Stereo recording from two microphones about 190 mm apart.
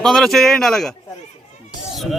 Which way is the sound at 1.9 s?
Centre (ahead or behind).